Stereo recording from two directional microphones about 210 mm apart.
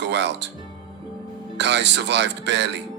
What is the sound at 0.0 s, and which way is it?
Speech, 55° right (ahead or behind).